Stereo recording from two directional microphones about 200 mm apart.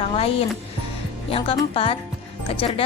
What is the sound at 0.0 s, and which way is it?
Music, 30° left (ahead or behind).